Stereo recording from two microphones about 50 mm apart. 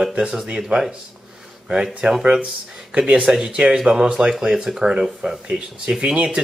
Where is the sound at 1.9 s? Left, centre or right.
Centre.